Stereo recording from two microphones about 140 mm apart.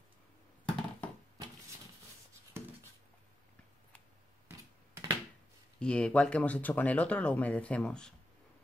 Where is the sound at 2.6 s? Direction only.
15° right (ahead or behind).